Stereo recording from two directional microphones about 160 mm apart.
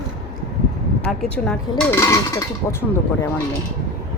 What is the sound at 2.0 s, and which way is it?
Speech, 20° left (ahead or behind).